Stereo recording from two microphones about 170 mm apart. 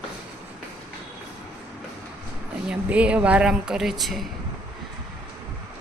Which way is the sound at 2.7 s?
5° right (ahead or behind).